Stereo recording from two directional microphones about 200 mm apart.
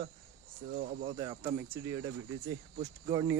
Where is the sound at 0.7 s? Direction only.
40° right (ahead or behind).